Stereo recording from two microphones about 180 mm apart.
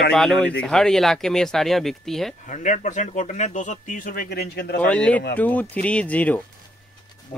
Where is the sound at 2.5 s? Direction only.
45° left (ahead or behind); by 4.7 s 65° left (ahead or behind).